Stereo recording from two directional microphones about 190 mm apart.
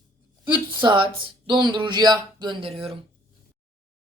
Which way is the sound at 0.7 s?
25° right (ahead or behind).